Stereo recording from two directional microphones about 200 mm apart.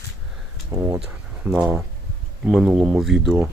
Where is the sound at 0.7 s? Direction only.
15° right (ahead or behind).